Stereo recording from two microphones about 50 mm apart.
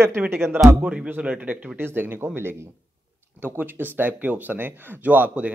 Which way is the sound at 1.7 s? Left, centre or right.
Right.